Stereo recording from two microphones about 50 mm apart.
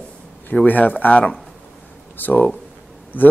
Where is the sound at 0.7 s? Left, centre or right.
Left.